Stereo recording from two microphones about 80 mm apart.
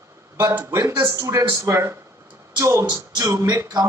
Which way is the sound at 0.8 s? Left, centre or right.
Right.